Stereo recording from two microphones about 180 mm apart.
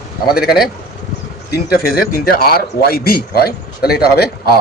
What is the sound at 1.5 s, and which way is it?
Speech, 55° left (ahead or behind).